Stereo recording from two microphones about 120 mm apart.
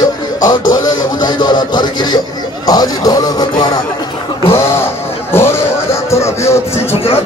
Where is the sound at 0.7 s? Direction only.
35° left (ahead or behind).